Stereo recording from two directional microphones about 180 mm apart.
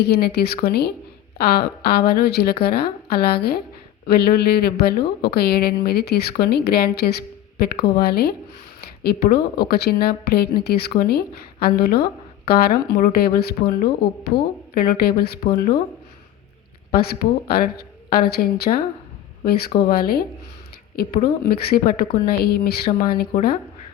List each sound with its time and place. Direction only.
0.0 s a woman's voice: 60° left (ahead or behind)
16.9 s a woman's voice: 60° left (ahead or behind)
21.5 s a woman's voice: 60° left (ahead or behind)